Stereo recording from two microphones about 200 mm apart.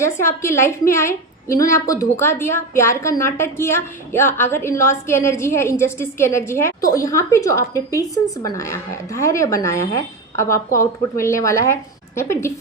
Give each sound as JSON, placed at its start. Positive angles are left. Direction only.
{"t": 0.0, "sound": "a woman's voice", "side_deg": 15}